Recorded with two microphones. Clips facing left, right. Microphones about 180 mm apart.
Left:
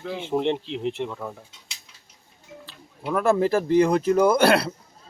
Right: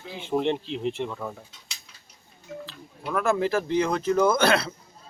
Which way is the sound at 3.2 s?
35° left (ahead or behind).